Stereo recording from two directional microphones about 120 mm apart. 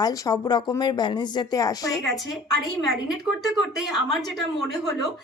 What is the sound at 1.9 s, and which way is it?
Speech, centre (ahead or behind).